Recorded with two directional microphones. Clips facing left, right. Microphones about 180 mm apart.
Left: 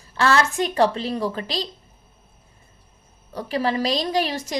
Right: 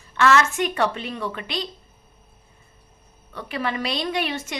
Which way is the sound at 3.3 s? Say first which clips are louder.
Left 4 dB; 35° left (ahead or behind).